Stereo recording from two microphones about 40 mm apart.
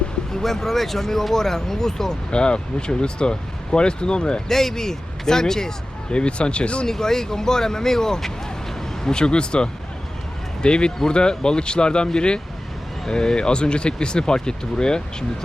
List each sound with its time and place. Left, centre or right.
0.4 s speech: centre
2.3 s speech: left
4.4 s speech: centre; by 6.8 s left
6.8 s speech: centre